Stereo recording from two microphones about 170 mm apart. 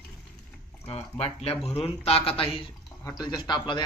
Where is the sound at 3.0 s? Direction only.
20° left (ahead or behind).